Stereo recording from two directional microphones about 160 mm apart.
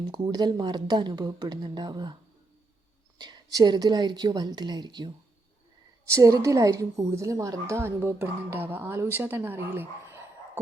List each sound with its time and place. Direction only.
0.1 s a woman's voice: 25° right (ahead or behind)
3.2 s a woman's voice: 25° right (ahead or behind)